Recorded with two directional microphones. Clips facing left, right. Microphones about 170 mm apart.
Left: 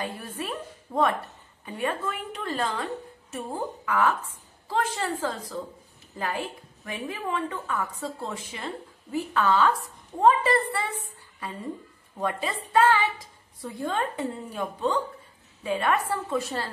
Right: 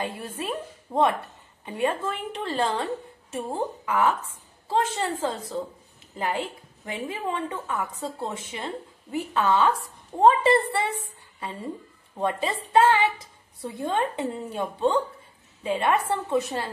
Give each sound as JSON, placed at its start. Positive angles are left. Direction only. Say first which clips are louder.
{"t": 0.0, "sound": "a woman's voice", "louder": "right 2 dB", "side_deg": -25}
{"t": 12.2, "sound": "a woman's voice", "louder": "right 3 dB", "side_deg": -25}